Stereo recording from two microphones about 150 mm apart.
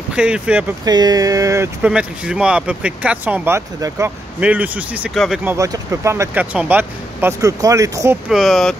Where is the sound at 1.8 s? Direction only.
5° right (ahead or behind).